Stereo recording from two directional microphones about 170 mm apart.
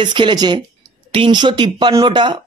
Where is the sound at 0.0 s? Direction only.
25° right (ahead or behind).